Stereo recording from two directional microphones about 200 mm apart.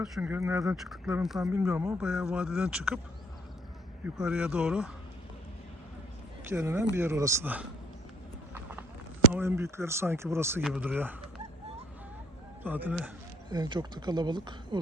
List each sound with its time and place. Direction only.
0.0 s speech: 5° right (ahead or behind)
0.8 s speech: centre (ahead or behind)
2.0 s speech: 5° right (ahead or behind)
4.0 s speech: 5° right (ahead or behind)
6.5 s speech: 10° right (ahead or behind)
9.3 s speech: 10° right (ahead or behind)
12.6 s speech: 10° right (ahead or behind)
13.5 s speech: 20° right (ahead or behind)